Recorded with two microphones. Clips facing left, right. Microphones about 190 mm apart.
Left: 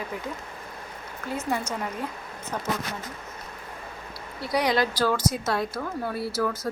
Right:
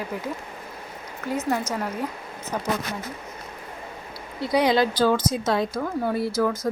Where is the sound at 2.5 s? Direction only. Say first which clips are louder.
Right 3 dB; 10° right (ahead or behind).